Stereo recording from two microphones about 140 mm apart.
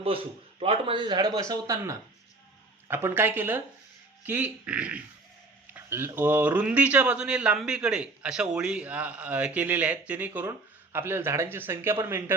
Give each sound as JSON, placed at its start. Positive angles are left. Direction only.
{"t": 0.6, "sound": "a man's voice", "side_deg": -40}
{"t": 5.7, "sound": "a sound", "side_deg": -15}
{"t": 6.1, "sound": "a man's voice", "side_deg": -15}